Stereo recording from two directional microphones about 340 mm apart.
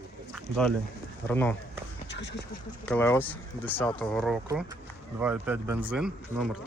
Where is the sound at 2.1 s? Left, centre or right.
Left.